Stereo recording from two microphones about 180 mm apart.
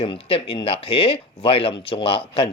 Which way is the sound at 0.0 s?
30° left (ahead or behind).